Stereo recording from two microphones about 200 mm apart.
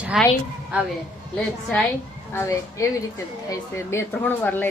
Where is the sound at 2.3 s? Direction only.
15° left (ahead or behind).